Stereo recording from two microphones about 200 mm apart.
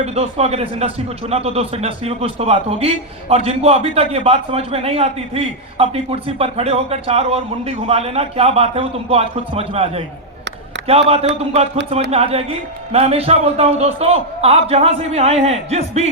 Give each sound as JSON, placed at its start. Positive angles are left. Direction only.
{"t": 0.0, "sound": "a man's voice", "side_deg": -30}